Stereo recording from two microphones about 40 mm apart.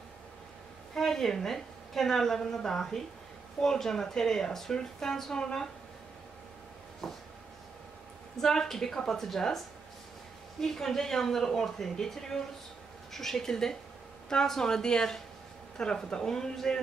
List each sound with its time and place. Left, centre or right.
0.9 s a woman's voice: centre
7.0 s a sound: centre
8.4 s speech: centre
10.6 s speech: centre